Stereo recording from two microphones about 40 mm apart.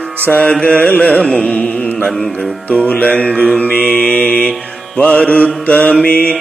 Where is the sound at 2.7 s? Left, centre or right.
Left.